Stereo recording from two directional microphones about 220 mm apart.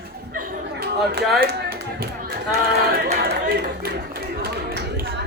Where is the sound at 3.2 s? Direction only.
45° right (ahead or behind).